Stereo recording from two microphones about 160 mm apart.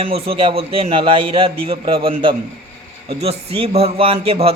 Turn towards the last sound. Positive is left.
turn(degrees=-40)  # may be behind; listen again after turning